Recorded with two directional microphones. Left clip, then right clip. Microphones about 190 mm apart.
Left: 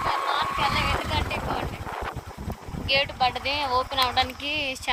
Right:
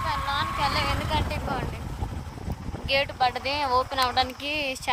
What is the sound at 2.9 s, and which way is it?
Speech, 20° right (ahead or behind).